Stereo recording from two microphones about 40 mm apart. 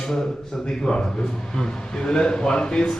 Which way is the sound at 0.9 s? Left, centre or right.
Left.